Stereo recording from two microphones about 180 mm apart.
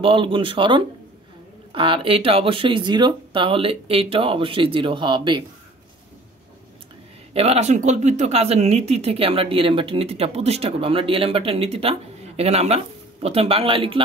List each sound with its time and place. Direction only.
0.0 s speech: 30° right (ahead or behind)
7.3 s speech: 35° right (ahead or behind)